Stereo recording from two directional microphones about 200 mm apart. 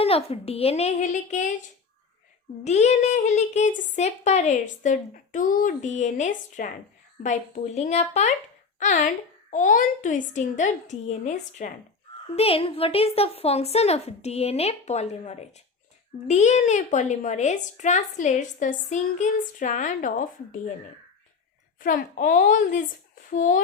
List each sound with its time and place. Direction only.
0.0 s speech: 30° left (ahead or behind)
2.6 s speech: 35° left (ahead or behind)
21.8 s speech: 40° left (ahead or behind)